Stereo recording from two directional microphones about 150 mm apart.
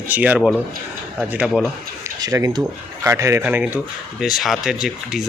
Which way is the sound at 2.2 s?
20° right (ahead or behind).